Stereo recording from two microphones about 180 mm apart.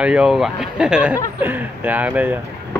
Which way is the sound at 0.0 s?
5° right (ahead or behind).